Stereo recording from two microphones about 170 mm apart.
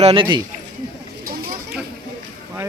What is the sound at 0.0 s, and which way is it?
Speech, 30° right (ahead or behind).